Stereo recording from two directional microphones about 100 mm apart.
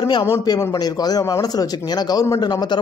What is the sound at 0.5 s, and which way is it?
A man's voice, 40° left (ahead or behind).